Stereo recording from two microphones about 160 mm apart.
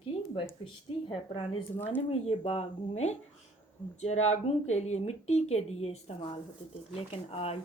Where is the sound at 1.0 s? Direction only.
30° left (ahead or behind).